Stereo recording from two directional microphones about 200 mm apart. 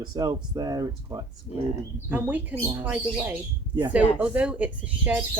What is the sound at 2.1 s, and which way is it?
Speech, 10° right (ahead or behind).